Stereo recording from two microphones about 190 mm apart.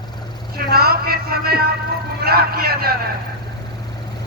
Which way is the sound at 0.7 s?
55° right (ahead or behind).